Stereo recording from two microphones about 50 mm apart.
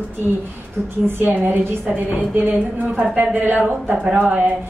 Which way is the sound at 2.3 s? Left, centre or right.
Right.